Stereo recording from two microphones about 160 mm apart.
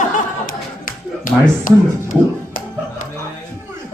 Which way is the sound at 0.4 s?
60° left (ahead or behind).